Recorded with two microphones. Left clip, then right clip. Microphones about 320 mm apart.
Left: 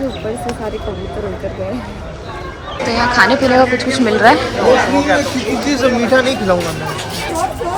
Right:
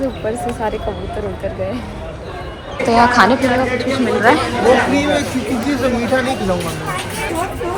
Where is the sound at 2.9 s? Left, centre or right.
Centre.